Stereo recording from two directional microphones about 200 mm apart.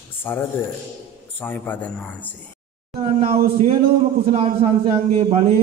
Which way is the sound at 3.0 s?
30° right (ahead or behind).